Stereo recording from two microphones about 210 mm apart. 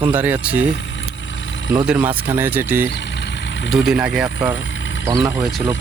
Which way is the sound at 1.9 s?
5° right (ahead or behind).